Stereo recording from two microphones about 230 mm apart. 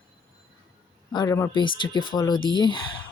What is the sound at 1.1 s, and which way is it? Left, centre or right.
Speech, centre.